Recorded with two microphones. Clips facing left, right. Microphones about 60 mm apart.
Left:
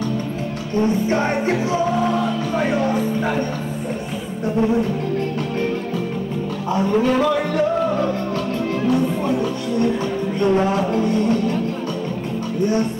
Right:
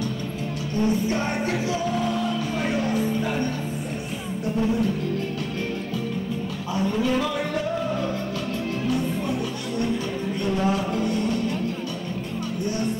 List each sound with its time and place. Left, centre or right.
0.7 s music: left
6.7 s speech: left
10.4 s music: left